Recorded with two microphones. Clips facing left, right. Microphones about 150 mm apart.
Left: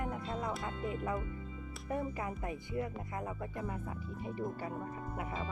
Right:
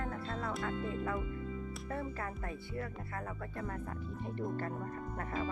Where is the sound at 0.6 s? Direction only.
20° left (ahead or behind).